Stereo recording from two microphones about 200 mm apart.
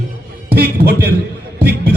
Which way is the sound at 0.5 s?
50° right (ahead or behind).